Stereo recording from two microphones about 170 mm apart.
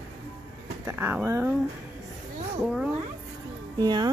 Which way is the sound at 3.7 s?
25° right (ahead or behind).